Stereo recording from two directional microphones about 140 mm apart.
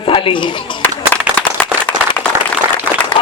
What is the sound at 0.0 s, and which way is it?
Speech, 40° left (ahead or behind).